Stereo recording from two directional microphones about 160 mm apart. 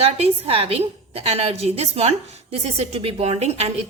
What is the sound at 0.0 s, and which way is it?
A woman's voice, 40° right (ahead or behind).